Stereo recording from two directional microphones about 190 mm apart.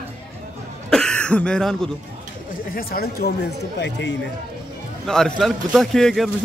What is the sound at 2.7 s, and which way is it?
Speech, 50° left (ahead or behind).